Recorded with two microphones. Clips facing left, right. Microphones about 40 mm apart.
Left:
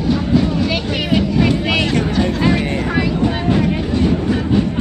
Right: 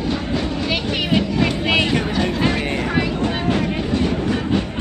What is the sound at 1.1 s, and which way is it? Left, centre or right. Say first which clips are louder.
Crowd: left 4 dB; right.